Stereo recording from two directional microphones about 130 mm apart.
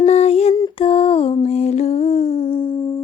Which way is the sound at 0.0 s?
55° left (ahead or behind).